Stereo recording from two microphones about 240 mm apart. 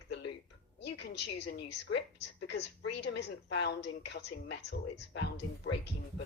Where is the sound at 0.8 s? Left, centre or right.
Left.